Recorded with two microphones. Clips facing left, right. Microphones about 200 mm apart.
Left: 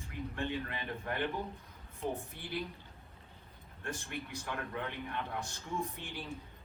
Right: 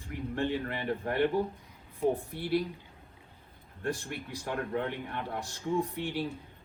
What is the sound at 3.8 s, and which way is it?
Speech, 35° right (ahead or behind).